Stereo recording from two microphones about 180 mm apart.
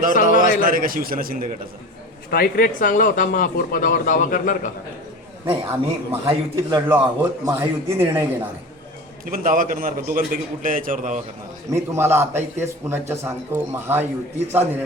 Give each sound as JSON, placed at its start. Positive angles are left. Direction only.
{"t": 0.6, "sound": "a man's voice", "side_deg": -50}
{"t": 2.3, "sound": "a man's voice", "side_deg": 55}
{"t": 5.5, "sound": "a man's voice", "side_deg": -15}
{"t": 9.2, "sound": "a man's voice", "side_deg": -50}
{"t": 11.7, "sound": "a man's voice", "side_deg": -15}